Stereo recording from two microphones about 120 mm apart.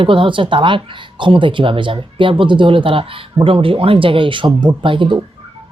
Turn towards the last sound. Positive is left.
turn(degrees=-45)  # may be behind; listen again after turning